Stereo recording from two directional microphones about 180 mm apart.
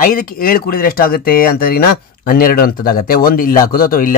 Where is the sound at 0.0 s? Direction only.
50° left (ahead or behind).